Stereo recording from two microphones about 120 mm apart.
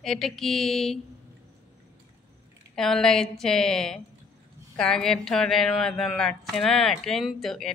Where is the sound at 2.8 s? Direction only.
5° left (ahead or behind).